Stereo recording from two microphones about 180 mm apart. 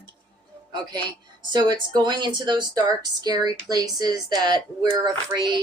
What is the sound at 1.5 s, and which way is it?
A woman's voice, 25° right (ahead or behind).